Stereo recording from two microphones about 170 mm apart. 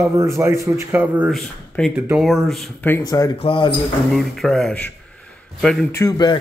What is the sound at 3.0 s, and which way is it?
Speech, 25° left (ahead or behind).